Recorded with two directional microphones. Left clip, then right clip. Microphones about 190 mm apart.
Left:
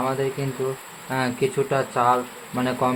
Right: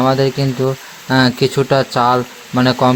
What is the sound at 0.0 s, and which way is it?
Speech, 50° right (ahead or behind).